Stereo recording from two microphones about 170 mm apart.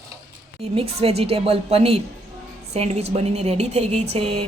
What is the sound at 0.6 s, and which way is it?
A woman's voice, 35° right (ahead or behind).